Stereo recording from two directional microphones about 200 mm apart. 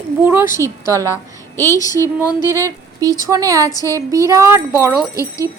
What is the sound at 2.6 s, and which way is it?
Speech, 15° right (ahead or behind).